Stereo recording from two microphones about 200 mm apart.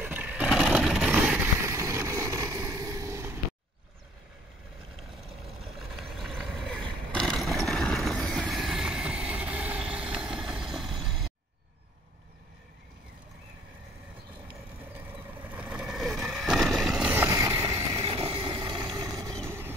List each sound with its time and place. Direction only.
0.0 s vehicle: 5° right (ahead or behind)
5.6 s vehicle: centre (ahead or behind)
14.5 s vehicle: 5° right (ahead or behind)
18.0 s a sound: 30° right (ahead or behind)
18.9 s vehicle: 15° right (ahead or behind)